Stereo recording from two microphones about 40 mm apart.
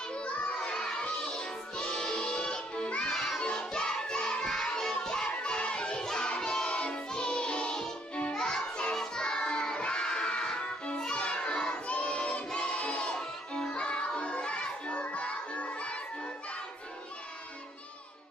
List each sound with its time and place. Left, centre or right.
0.1 s music: left
3.1 s children shouting: centre
5.0 s music: centre
8.1 s music: left
8.4 s music: centre
9.0 s child singing: centre
11.9 s crowd: left
12.5 s music: left